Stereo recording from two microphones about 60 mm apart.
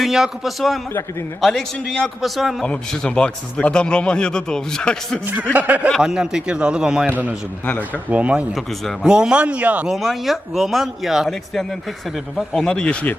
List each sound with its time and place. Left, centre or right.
0.0 s speech: centre
1.4 s a man's voice: centre
2.2 s speech: centre
2.6 s a man's voice: centre
5.5 s a man's voice: right
6.0 s a man's voice: centre
7.1 s a man's voice: right
9.8 s speech: centre
12.6 s speech: centre